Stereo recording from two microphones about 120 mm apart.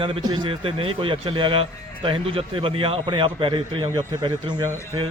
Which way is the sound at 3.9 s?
35° right (ahead or behind).